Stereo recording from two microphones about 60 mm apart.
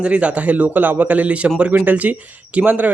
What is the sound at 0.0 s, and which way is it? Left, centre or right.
Speech, centre.